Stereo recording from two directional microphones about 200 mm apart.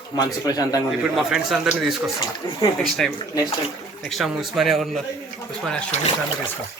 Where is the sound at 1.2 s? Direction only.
Centre (ahead or behind).